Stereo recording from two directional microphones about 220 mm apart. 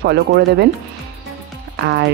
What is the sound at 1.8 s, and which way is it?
Speech, 50° right (ahead or behind).